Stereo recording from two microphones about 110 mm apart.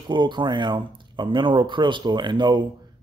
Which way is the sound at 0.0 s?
45° right (ahead or behind).